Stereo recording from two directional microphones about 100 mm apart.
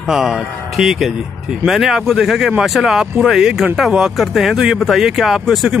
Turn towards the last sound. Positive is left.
turn(degrees=0)  # may be behind; listen again after turning